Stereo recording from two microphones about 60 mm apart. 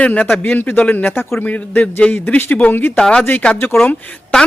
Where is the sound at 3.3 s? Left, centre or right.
Left.